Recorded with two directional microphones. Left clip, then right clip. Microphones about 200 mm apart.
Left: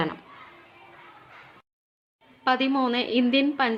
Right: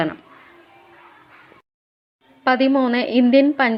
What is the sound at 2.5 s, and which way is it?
A woman's voice, 25° right (ahead or behind).